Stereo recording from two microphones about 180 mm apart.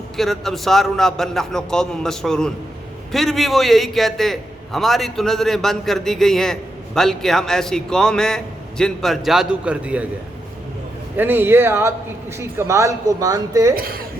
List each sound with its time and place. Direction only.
0.2 s a man's voice: centre (ahead or behind)
11.2 s speech: 10° right (ahead or behind)
13.7 s speech: 55° right (ahead or behind)